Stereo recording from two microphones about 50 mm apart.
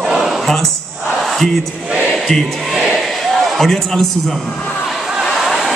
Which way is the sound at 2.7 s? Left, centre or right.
Centre.